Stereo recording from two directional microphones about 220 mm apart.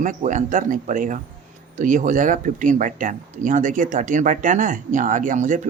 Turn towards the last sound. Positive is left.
turn(degrees=-35)  # may be behind; listen again after turning